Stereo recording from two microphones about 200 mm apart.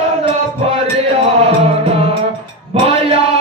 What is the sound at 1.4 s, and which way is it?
Music, 30° right (ahead or behind).